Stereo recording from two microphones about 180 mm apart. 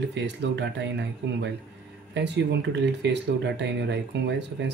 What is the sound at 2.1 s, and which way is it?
Speech, 75° right (ahead or behind).